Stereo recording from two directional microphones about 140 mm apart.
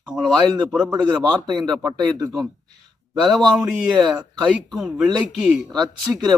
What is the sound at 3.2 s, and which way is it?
Speech, centre (ahead or behind).